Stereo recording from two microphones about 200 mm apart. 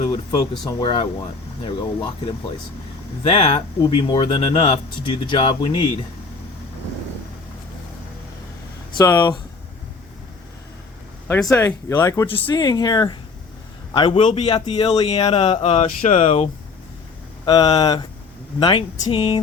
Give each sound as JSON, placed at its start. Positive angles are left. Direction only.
{"t": 0.6, "sound": "speech", "side_deg": 20}
{"t": 9.0, "sound": "speech", "side_deg": 20}
{"t": 11.3, "sound": "speech", "side_deg": 5}